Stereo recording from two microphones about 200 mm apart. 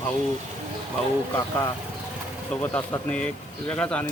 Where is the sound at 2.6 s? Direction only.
10° left (ahead or behind).